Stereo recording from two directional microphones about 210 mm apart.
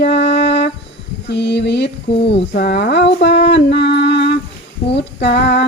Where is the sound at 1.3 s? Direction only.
55° left (ahead or behind).